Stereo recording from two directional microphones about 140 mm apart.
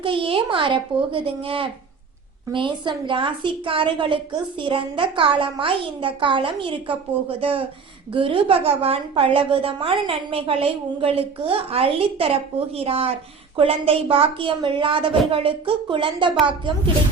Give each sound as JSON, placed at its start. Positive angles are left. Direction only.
{"t": 0.0, "sound": "a woman's voice", "side_deg": -35}
{"t": 8.1, "sound": "a woman's voice", "side_deg": -35}